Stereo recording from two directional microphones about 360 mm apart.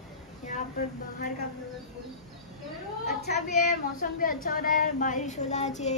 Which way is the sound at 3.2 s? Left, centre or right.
Left.